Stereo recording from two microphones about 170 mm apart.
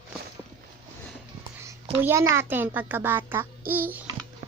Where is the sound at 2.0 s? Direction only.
15° right (ahead or behind).